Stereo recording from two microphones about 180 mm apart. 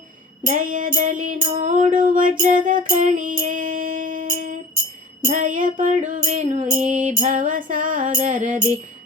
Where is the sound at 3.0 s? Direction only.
45° right (ahead or behind).